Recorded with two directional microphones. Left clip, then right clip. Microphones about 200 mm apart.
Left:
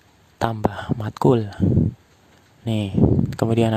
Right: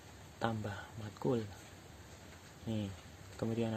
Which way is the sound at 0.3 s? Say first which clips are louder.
Left 16 dB; 55° left (ahead or behind).